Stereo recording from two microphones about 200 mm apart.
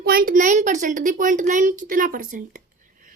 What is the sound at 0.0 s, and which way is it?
A woman's voice, 50° right (ahead or behind).